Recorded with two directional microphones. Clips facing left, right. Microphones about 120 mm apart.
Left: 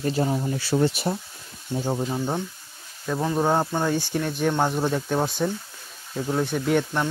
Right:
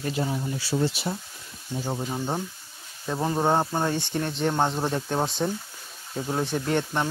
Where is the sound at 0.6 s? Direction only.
55° left (ahead or behind).